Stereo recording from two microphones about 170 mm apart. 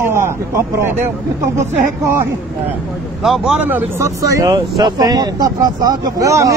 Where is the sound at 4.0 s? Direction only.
20° right (ahead or behind).